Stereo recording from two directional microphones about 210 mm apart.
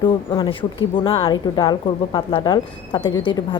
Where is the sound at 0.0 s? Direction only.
20° left (ahead or behind).